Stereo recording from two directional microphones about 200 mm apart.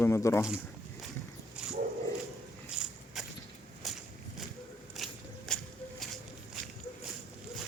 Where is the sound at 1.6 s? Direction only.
5° right (ahead or behind).